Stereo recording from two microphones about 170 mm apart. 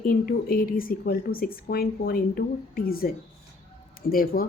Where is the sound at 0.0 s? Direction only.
60° left (ahead or behind).